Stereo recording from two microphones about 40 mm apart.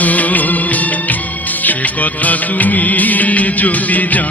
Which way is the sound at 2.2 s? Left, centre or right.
Left.